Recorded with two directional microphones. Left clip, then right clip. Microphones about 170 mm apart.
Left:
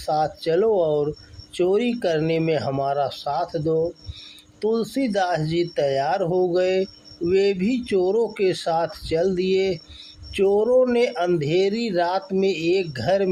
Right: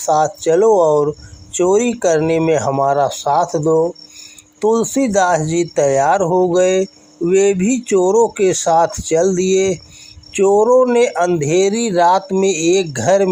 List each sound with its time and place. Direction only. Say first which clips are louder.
0.0 s speech: right 8 dB; 20° right (ahead or behind)